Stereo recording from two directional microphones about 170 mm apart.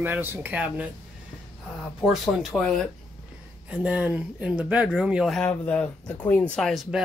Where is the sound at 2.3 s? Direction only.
Centre (ahead or behind).